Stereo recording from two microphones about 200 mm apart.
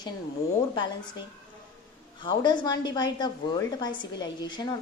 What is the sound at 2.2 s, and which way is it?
A woman's voice, 20° left (ahead or behind).